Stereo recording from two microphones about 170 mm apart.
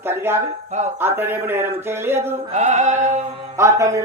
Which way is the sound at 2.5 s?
45° right (ahead or behind).